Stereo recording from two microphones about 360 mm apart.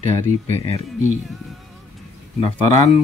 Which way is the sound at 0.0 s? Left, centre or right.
Centre.